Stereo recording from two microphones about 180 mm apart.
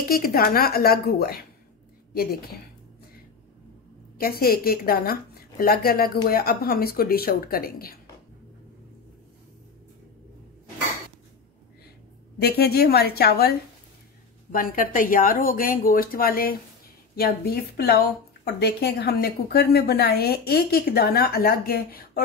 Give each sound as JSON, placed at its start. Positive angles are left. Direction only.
{"t": 0.1, "sound": "a woman's voice", "side_deg": 55}
{"t": 4.2, "sound": "a woman's voice", "side_deg": 55}
{"t": 12.4, "sound": "a woman's voice", "side_deg": 60}
{"t": 14.5, "sound": "a woman's voice", "side_deg": 50}